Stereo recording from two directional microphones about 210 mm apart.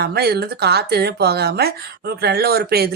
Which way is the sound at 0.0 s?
50° right (ahead or behind).